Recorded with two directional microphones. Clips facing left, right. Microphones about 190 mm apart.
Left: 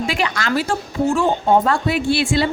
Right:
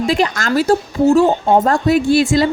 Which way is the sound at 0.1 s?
40° right (ahead or behind).